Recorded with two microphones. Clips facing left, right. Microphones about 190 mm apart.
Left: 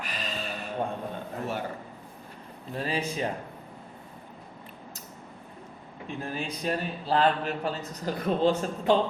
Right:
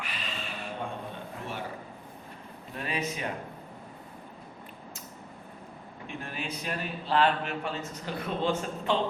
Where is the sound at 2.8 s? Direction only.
30° left (ahead or behind).